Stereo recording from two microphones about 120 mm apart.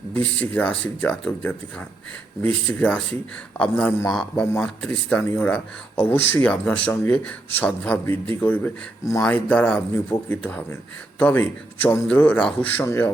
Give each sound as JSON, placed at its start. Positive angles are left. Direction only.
{"t": 0.1, "sound": "a man's voice", "side_deg": 10}
{"t": 12.8, "sound": "a man's voice", "side_deg": 25}